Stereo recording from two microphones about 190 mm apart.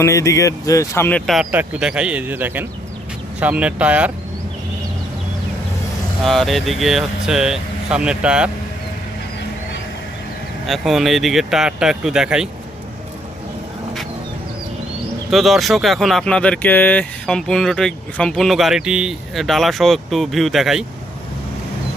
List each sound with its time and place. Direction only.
0.0 s speech: 15° left (ahead or behind)
1.3 s speech: 5° right (ahead or behind)
6.2 s speech: centre (ahead or behind)
10.7 s speech: centre (ahead or behind)
15.3 s speech: centre (ahead or behind)